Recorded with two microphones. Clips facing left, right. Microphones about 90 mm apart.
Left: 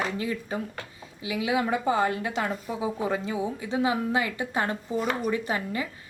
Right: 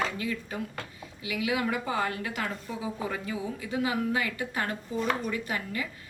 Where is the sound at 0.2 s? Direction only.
30° left (ahead or behind).